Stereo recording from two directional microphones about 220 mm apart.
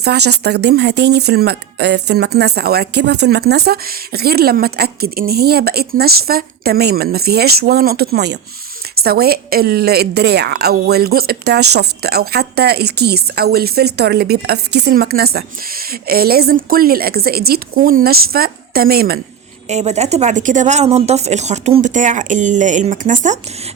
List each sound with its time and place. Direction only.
0.0 s a woman's voice: 50° right (ahead or behind)
19.6 s speech: 30° right (ahead or behind)